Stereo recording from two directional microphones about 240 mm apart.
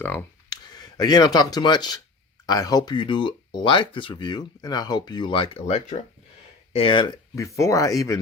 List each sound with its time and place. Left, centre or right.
0.0 s speech: centre